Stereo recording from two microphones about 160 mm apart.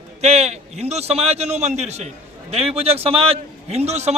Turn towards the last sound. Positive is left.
turn(degrees=-40)  # may be behind; listen again after turning